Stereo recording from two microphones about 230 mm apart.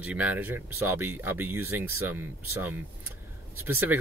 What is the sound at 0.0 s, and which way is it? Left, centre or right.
Speech, centre.